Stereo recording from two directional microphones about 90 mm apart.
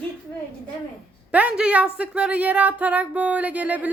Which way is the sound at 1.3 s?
15° right (ahead or behind).